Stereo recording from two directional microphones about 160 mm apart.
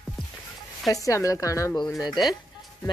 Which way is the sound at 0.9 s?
20° left (ahead or behind).